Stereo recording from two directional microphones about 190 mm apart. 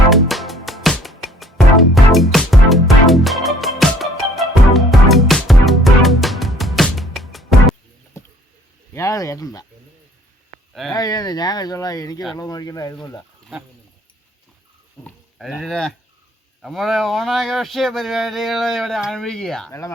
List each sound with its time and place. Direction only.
0.1 s music: centre (ahead or behind)
8.1 s a sound: 15° left (ahead or behind)
10.9 s speech: 20° left (ahead or behind)
15.0 s speech: centre (ahead or behind)